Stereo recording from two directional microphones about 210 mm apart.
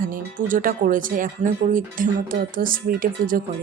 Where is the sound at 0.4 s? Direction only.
40° right (ahead or behind).